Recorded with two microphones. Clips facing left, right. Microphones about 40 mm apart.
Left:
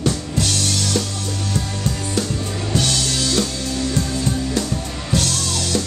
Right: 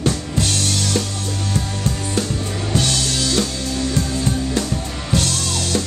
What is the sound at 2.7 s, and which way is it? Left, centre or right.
Music, centre.